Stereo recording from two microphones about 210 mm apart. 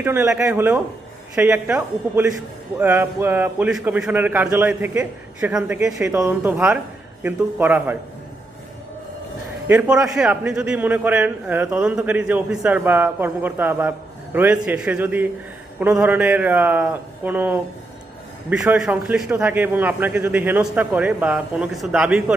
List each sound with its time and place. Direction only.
0.0 s a man's voice: 10° right (ahead or behind)
9.6 s a man's voice: 5° right (ahead or behind)